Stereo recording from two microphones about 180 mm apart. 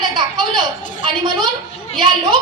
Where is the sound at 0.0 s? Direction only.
25° right (ahead or behind).